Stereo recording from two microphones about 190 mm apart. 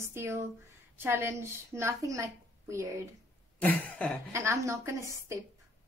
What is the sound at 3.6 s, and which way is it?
Cough, 10° left (ahead or behind).